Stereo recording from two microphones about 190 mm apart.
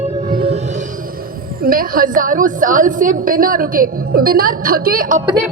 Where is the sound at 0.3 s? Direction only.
30° right (ahead or behind).